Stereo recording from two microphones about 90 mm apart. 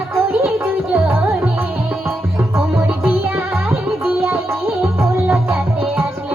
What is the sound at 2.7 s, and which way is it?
Music, 20° right (ahead or behind).